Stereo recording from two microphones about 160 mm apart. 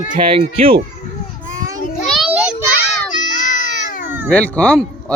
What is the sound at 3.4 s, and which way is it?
Baby cry, 50° left (ahead or behind).